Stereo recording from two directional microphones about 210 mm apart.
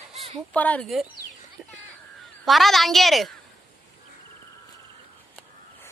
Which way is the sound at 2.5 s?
Centre (ahead or behind).